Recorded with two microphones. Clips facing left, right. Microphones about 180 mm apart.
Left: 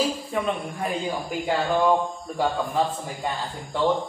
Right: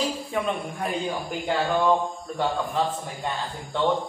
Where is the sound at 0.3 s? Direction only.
Centre (ahead or behind).